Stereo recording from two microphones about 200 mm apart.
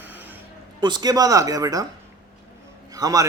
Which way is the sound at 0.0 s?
10° right (ahead or behind).